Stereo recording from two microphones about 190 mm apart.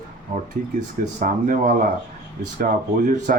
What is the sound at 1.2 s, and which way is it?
Speech, 45° right (ahead or behind).